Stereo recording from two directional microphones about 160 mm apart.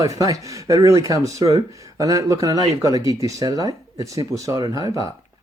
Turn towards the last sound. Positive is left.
turn(degrees=-20)  # may be behind; listen again after turning